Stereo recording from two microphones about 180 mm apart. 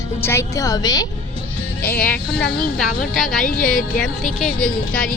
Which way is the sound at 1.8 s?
10° left (ahead or behind).